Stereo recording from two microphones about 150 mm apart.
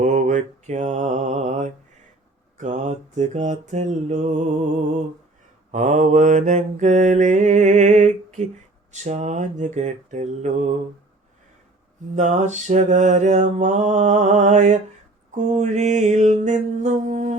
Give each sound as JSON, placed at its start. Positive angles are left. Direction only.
{"t": 0.0, "sound": "mantra", "side_deg": -55}
{"t": 12.1, "sound": "mantra", "side_deg": -55}